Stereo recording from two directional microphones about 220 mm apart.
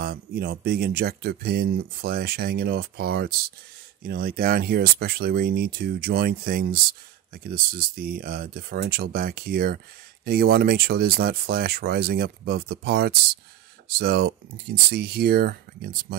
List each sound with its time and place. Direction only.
0.0 s speech: 45° right (ahead or behind)